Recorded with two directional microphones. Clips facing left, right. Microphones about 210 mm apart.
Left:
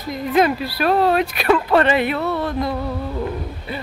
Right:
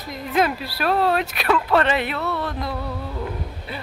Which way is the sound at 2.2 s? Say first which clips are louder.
Left 5 dB; 20° left (ahead or behind).